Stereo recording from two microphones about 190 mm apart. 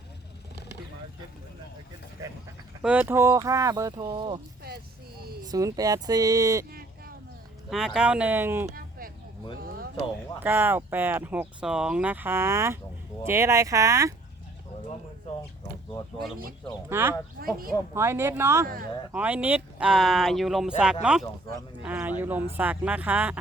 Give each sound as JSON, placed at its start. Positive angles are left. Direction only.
{"t": 2.8, "sound": "speech", "side_deg": -10}
{"t": 4.7, "sound": "a sound", "side_deg": -55}
{"t": 5.5, "sound": "speech", "side_deg": -20}
{"t": 7.7, "sound": "speech", "side_deg": 0}
{"t": 8.7, "sound": "a sound", "side_deg": -50}
{"t": 10.4, "sound": "speech", "side_deg": -10}
{"t": 16.9, "sound": "speech", "side_deg": -10}
{"t": 17.4, "sound": "speech", "side_deg": -50}
{"t": 17.9, "sound": "speech", "side_deg": -15}